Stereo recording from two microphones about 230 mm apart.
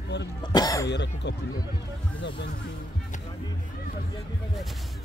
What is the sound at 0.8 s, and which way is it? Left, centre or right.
Speech, left.